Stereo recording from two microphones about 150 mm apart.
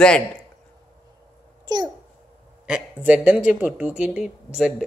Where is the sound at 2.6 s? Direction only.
5° right (ahead or behind).